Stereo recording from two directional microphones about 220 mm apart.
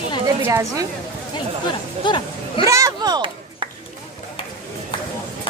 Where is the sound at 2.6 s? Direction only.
15° right (ahead or behind).